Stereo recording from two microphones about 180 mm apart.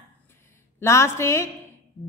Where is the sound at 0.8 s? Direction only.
15° left (ahead or behind).